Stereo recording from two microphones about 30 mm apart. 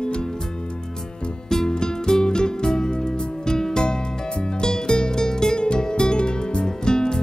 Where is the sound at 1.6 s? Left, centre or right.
Left.